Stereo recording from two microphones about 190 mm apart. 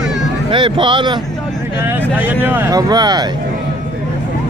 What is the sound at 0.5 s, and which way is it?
Speech, 25° right (ahead or behind).